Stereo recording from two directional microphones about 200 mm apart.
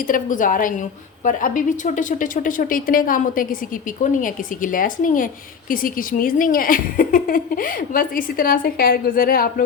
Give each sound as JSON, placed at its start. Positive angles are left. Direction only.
{"t": 0.1, "sound": "a woman's voice", "side_deg": 40}